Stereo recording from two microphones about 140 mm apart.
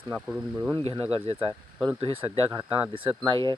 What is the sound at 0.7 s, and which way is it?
Speech, 35° right (ahead or behind).